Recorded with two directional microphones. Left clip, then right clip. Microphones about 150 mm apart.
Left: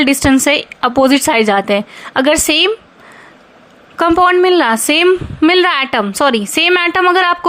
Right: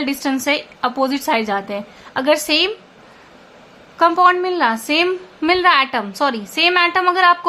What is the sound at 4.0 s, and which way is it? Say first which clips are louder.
A woman's voice: left 3 dB; 55° left (ahead or behind).